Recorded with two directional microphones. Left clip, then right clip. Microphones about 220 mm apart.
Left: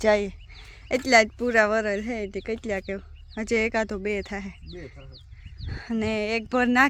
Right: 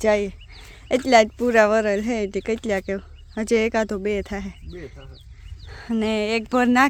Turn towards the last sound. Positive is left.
turn(degrees=-15)  # may be behind; listen again after turning